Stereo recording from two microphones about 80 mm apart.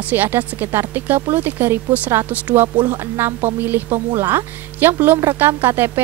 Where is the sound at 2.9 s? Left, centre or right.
Right.